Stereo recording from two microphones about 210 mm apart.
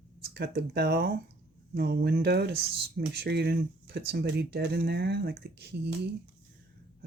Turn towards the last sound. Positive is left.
turn(degrees=-50)  # may be behind; listen again after turning